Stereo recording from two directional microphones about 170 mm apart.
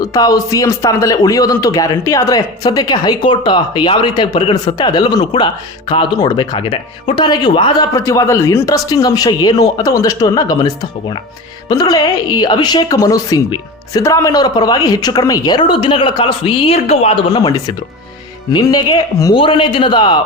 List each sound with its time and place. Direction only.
0.0 s speech: 20° left (ahead or behind)
11.7 s speech: 20° left (ahead or behind); by 17.2 s 35° left (ahead or behind)
17.3 s speech: 25° left (ahead or behind)